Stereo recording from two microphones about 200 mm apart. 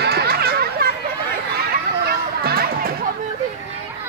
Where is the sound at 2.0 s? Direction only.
50° right (ahead or behind).